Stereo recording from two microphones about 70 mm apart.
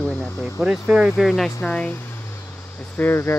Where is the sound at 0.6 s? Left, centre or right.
Centre.